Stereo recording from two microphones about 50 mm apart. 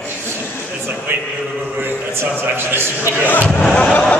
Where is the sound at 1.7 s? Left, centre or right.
Right.